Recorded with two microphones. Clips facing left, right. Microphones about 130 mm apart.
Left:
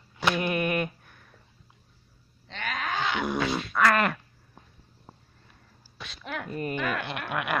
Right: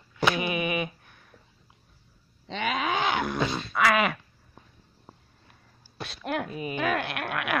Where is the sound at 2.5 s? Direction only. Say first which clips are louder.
Right 5 dB; 85° right; by 3.2 s 60° right (ahead or behind).